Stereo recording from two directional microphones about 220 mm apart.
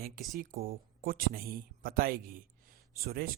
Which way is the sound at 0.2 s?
40° right (ahead or behind).